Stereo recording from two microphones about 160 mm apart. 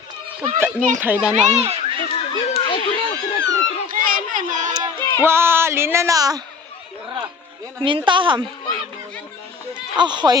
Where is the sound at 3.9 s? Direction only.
60° right (ahead or behind).